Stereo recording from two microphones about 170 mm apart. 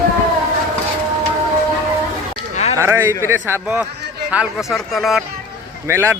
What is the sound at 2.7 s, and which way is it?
A man's voice, 15° right (ahead or behind).